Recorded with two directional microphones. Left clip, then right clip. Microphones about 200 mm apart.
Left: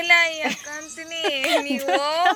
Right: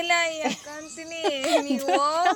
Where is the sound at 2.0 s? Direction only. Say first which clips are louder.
Left 1 dB; 25° right (ahead or behind).